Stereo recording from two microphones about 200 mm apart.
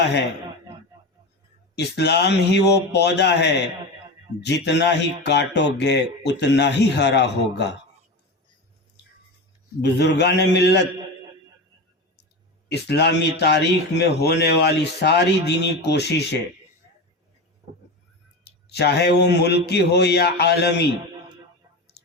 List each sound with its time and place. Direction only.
1.7 s speech: 55° left (ahead or behind)
9.8 s speech: 60° left (ahead or behind)
12.6 s speech: 55° left (ahead or behind)
18.7 s speech: 55° left (ahead or behind)